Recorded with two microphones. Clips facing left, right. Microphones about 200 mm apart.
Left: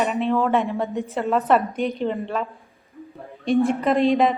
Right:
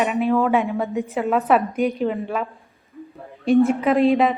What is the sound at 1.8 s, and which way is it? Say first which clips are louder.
Speech: right 3 dB; 30° left (ahead or behind).